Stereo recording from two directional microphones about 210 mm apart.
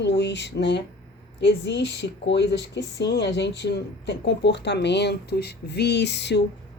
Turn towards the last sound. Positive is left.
turn(degrees=55)  # may be behind; listen again after turning